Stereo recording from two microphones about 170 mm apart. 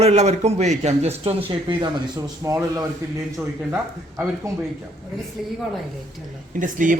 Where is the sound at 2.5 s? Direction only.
15° right (ahead or behind).